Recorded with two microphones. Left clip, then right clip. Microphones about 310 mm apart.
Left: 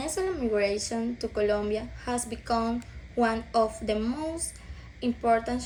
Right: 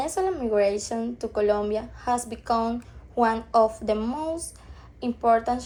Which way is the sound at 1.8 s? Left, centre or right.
Centre.